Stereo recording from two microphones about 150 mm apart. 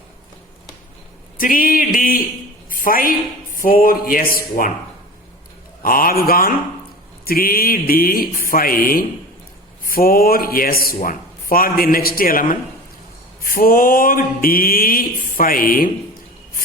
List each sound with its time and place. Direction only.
1.4 s a woman's voice: 70° left (ahead or behind)
5.8 s speech: 70° left (ahead or behind)